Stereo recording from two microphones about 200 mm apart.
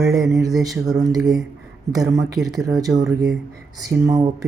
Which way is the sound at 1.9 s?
20° right (ahead or behind).